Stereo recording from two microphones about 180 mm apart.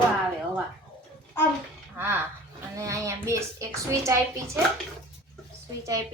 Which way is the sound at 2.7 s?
15° right (ahead or behind).